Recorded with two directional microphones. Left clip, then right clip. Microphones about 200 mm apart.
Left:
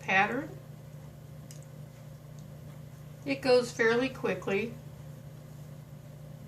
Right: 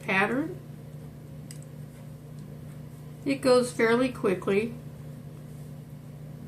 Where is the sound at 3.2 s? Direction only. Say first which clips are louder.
Right 3 dB; 30° left (ahead or behind).